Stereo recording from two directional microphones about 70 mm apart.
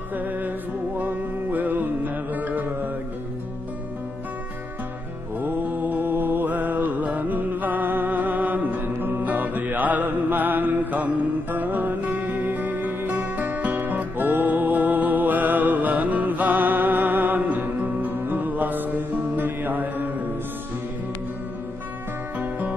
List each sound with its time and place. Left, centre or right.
0.1 s music: right
5.4 s mantra: right
11.5 s music: right
22.4 s music: right